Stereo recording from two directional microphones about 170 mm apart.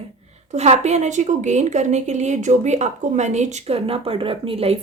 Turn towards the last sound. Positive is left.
turn(degrees=-35)  # may be behind; listen again after turning